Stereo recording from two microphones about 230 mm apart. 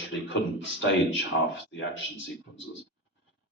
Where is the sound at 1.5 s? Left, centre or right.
Left.